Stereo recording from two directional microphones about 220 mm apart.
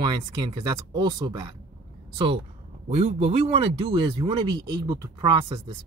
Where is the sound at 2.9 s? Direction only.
30° right (ahead or behind).